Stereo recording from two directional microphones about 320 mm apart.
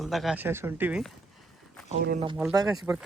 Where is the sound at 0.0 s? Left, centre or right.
Centre.